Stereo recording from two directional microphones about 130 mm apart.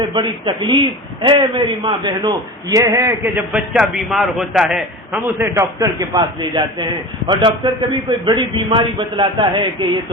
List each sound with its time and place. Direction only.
0.1 s a man's voice: 40° right (ahead or behind); by 3.6 s 15° right (ahead or behind)
3.8 s a man's voice: centre (ahead or behind)
5.4 s a man's voice: 25° right (ahead or behind)